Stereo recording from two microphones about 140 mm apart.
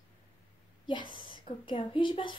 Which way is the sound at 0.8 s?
35° left (ahead or behind).